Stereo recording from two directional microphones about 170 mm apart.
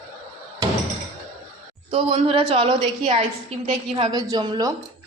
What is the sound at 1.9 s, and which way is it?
A woman's voice, 35° right (ahead or behind).